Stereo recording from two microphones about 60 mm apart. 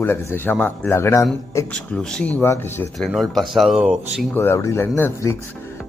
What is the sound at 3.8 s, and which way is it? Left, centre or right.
Speech, centre.